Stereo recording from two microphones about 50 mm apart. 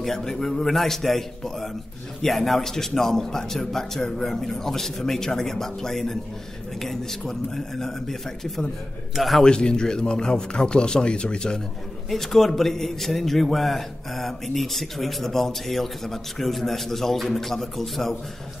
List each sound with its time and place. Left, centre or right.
0.0 s a man's voice: centre
9.4 s a man's voice: centre
12.1 s a man's voice: centre